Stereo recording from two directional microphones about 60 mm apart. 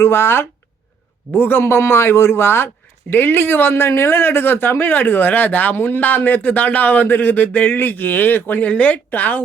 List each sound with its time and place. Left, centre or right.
0.0 s a man's voice: left